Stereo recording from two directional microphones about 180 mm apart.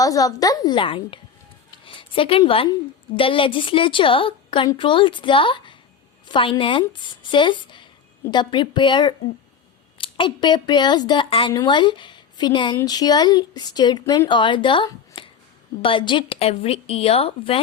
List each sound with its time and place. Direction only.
0.0 s a woman's voice: 20° left (ahead or behind)